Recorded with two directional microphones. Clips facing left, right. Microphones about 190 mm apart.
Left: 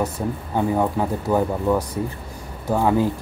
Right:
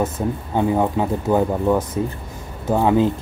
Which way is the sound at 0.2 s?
15° right (ahead or behind).